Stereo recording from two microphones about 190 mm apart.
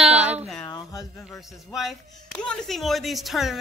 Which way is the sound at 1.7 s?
Centre (ahead or behind).